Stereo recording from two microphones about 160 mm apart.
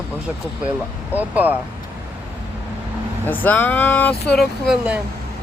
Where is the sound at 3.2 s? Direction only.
10° left (ahead or behind); by 5.0 s 5° right (ahead or behind).